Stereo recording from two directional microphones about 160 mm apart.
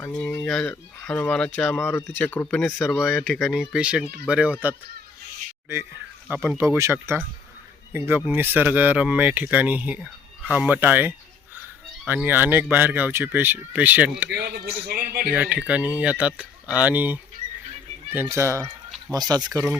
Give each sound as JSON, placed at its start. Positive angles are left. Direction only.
{"t": 0.0, "sound": "speech", "side_deg": 10}
{"t": 5.6, "sound": "speech", "side_deg": -15}
{"t": 14.3, "sound": "speech", "side_deg": -85}
{"t": 15.3, "sound": "speech", "side_deg": -10}
{"t": 18.9, "sound": "a sound", "side_deg": -5}
{"t": 19.1, "sound": "speech", "side_deg": -25}